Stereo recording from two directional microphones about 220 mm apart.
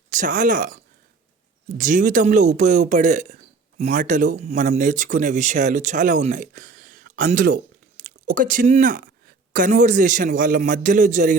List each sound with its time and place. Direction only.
0.1 s a man's voice: 35° right (ahead or behind)
1.8 s a man's voice: 35° right (ahead or behind)